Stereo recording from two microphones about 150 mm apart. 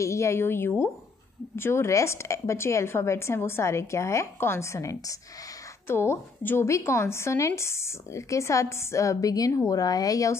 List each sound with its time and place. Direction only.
0.0 s a woman's voice: 20° left (ahead or behind)